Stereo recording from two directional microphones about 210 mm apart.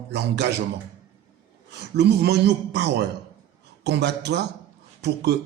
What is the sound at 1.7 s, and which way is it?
Speech, 55° right (ahead or behind).